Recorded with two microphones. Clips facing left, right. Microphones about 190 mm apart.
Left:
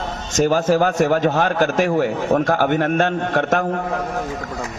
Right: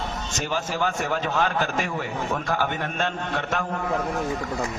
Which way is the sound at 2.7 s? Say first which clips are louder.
Left 10 dB; 60° left (ahead or behind).